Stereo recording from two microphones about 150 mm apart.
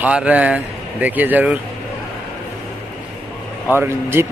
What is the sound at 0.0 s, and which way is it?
Speech, 10° right (ahead or behind).